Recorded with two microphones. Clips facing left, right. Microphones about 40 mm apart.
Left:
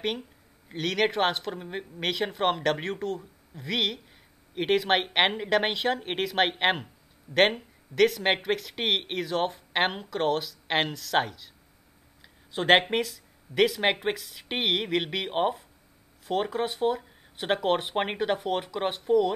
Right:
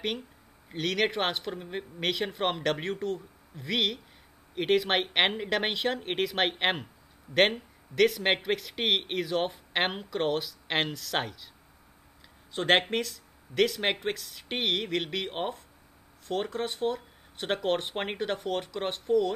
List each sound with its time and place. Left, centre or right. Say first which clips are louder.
0.7 s speech: left 2 dB; centre
7.3 s speech: left 1 dB; right
7.9 s speech: left 1 dB; centre
12.2 s a sound: left 2 dB; centre
12.9 s speech: left 3 dB; centre